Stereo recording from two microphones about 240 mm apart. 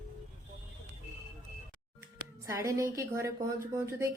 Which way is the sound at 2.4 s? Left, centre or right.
Centre.